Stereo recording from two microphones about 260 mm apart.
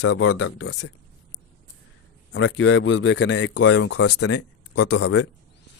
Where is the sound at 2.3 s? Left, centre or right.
Left.